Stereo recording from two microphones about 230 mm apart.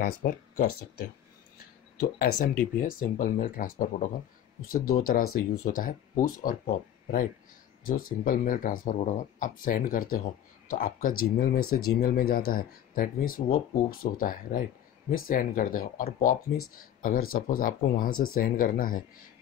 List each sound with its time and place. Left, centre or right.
0.0 s speech: left
2.4 s speech: left